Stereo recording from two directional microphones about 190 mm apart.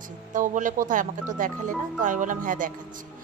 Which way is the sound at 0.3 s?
40° right (ahead or behind).